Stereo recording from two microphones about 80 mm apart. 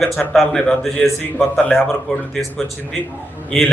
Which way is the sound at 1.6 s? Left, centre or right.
Centre.